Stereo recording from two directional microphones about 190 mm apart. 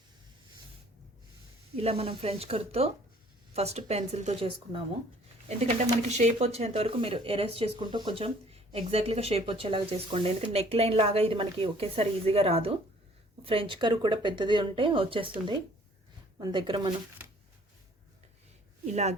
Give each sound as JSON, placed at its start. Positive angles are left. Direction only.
{"t": 1.7, "sound": "a woman's voice", "side_deg": -30}
{"t": 16.4, "sound": "a woman's voice", "side_deg": -25}
{"t": 18.9, "sound": "speech", "side_deg": -35}